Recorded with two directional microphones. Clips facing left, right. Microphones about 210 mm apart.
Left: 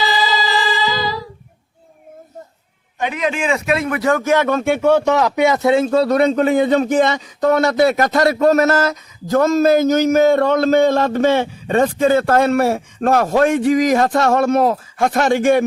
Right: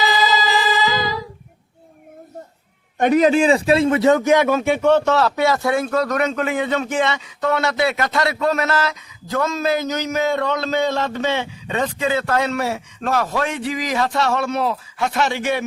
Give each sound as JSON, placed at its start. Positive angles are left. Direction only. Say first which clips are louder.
{"t": 3.0, "sound": "a man's voice", "louder": "right 6 dB", "side_deg": -40}